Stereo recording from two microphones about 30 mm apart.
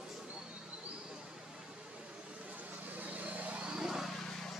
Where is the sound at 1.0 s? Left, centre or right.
Centre.